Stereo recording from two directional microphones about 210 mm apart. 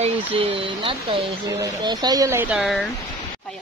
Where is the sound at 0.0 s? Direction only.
25° right (ahead or behind).